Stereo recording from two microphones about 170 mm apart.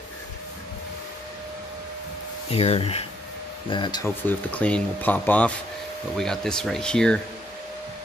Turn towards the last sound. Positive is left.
turn(degrees=5)  # may be behind; listen again after turning